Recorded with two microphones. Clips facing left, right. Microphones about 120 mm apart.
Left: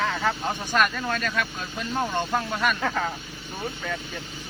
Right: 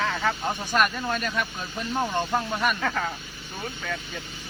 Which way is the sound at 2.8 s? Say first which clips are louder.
Left 1 dB; 5° left (ahead or behind).